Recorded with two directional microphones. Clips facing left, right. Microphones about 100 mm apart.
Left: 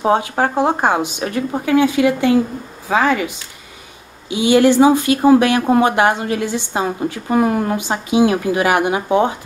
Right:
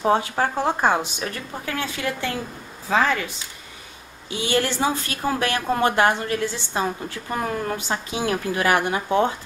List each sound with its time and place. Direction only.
0.0 s a woman's voice: 15° left (ahead or behind)